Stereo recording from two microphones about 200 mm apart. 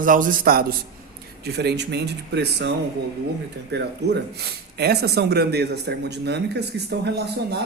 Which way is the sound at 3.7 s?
55° right (ahead or behind).